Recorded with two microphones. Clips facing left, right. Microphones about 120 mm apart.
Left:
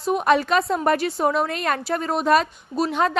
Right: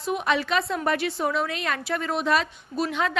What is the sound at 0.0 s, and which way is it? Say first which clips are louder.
A woman's voice: left 6 dB; 40° left (ahead or behind).